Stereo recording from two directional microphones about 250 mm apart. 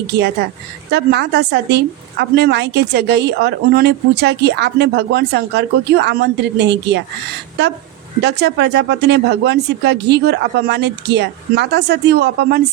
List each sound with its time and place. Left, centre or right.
0.9 s a woman's voice: right
8.2 s a woman's voice: right